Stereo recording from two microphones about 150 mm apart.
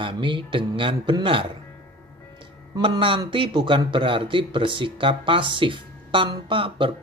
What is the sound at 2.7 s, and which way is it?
A man's voice, 35° right (ahead or behind).